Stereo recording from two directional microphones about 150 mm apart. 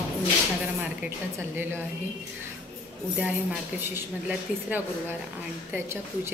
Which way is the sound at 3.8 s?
15° right (ahead or behind).